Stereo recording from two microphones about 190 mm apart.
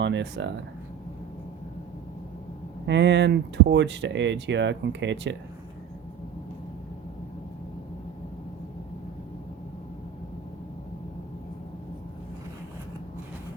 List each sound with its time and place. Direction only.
0.0 s speech: 70° right (ahead or behind)
2.8 s speech: 70° right (ahead or behind)